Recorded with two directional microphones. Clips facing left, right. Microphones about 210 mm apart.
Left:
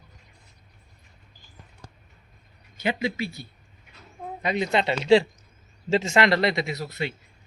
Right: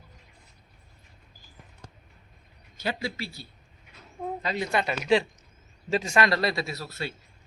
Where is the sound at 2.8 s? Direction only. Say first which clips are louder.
Left 5 dB; 20° left (ahead or behind).